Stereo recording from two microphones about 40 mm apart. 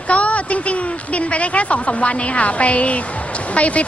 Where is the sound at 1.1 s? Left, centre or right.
Left.